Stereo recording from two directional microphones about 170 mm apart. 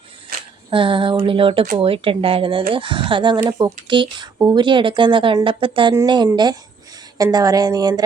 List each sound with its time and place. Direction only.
0.7 s speech: 30° right (ahead or behind)